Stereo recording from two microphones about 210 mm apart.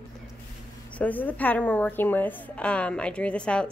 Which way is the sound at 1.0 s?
5° left (ahead or behind).